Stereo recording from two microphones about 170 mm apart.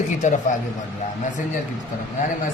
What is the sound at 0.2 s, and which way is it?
Speech, 45° left (ahead or behind).